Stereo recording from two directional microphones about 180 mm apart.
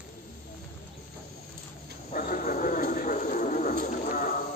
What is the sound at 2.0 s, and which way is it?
Dog, 45° left (ahead or behind).